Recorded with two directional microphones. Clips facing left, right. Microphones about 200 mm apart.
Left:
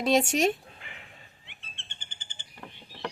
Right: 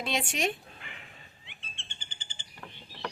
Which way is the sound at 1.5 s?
55° left (ahead or behind).